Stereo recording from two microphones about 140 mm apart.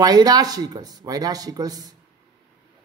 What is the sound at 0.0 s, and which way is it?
Speech, 30° right (ahead or behind).